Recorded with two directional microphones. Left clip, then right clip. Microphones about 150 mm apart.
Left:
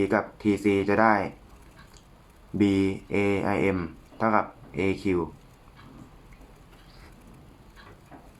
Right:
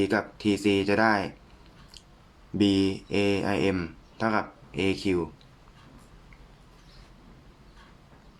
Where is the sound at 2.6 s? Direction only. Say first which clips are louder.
Even; 40° right (ahead or behind).